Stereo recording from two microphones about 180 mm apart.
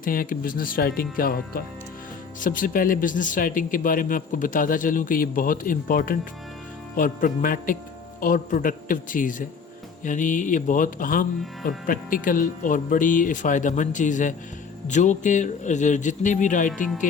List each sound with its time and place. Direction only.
0.0 s speech: 50° left (ahead or behind)